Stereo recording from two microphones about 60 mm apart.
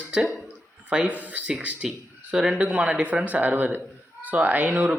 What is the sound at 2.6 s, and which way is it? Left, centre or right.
Speech, right.